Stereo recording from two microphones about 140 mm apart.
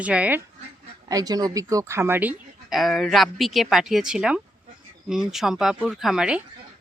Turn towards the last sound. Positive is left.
turn(degrees=-5)  # may be behind; listen again after turning